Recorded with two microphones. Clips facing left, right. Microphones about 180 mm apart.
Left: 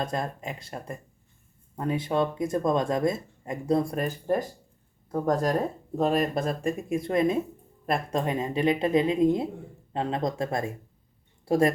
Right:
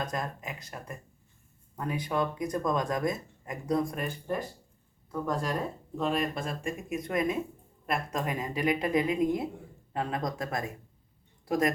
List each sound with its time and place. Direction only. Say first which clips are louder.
0.0 s speech: left 4 dB; 30° left (ahead or behind)